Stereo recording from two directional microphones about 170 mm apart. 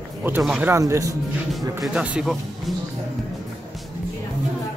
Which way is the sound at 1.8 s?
5° right (ahead or behind).